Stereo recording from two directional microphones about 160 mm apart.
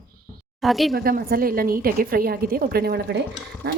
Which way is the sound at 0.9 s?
70° right (ahead or behind).